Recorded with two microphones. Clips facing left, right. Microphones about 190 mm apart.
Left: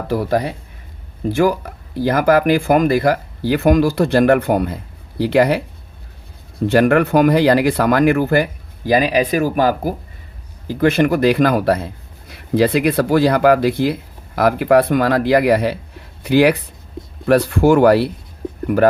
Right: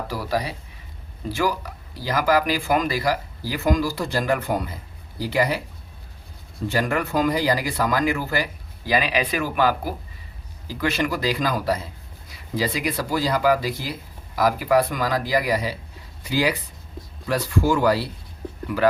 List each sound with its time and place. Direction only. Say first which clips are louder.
0.1 s speech: left 10 dB; 55° left (ahead or behind)
6.7 s speech: left 11 dB; 65° left (ahead or behind)